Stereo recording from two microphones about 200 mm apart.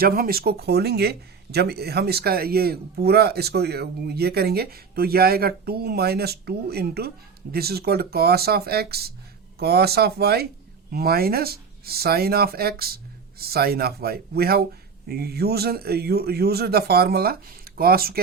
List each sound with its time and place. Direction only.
0.0 s speech: 50° right (ahead or behind)